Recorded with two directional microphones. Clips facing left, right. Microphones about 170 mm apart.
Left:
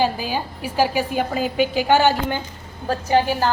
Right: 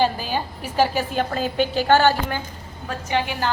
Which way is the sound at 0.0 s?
10° left (ahead or behind).